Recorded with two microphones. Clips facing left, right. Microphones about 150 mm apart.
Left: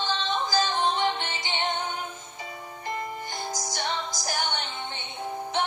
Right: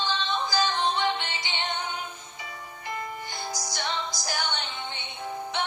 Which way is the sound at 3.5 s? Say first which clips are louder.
Even; 45° left (ahead or behind).